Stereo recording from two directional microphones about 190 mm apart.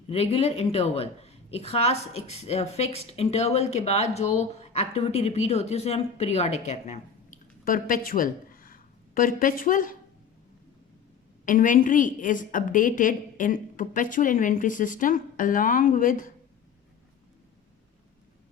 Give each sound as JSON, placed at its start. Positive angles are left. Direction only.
{"t": 0.1, "sound": "a woman's voice", "side_deg": 30}
{"t": 11.4, "sound": "a woman's voice", "side_deg": 45}